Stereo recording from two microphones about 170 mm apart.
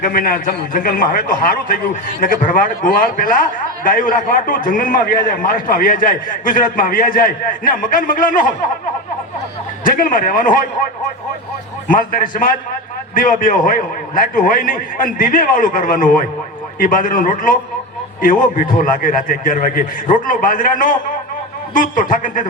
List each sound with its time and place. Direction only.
0.0 s a man's voice: 55° left (ahead or behind)
9.8 s a man's voice: 55° left (ahead or behind)
11.9 s a man's voice: 55° left (ahead or behind)